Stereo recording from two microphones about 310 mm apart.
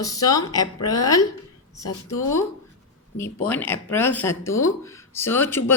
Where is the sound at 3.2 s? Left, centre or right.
Centre.